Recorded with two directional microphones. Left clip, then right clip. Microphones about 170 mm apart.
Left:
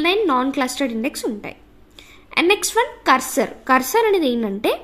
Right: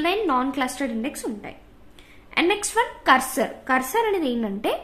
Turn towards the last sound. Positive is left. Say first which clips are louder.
# left 5 dB
turn(degrees=30)  # may be behind; listen again after turning